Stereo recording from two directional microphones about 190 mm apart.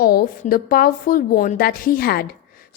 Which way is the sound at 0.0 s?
50° left (ahead or behind).